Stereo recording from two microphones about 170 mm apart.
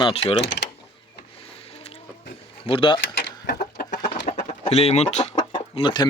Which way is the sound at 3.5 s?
65° left (ahead or behind).